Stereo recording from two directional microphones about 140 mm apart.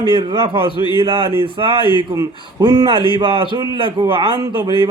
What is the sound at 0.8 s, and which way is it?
Speech, 35° left (ahead or behind).